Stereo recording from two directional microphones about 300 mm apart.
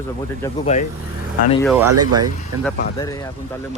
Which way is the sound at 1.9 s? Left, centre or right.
Right.